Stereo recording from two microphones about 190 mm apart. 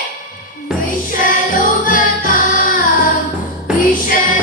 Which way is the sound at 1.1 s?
45° left (ahead or behind).